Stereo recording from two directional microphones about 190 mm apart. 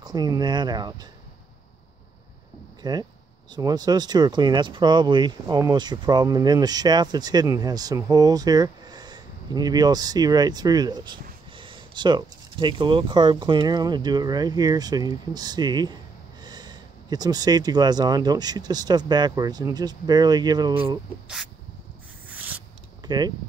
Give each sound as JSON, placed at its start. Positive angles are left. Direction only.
{"t": 0.0, "sound": "speech", "side_deg": -20}
{"t": 2.8, "sound": "speech", "side_deg": -20}
{"t": 22.3, "sound": "a sound", "side_deg": -10}
{"t": 23.0, "sound": "speech", "side_deg": -20}